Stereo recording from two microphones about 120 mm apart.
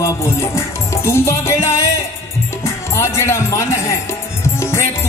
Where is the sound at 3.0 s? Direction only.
25° left (ahead or behind).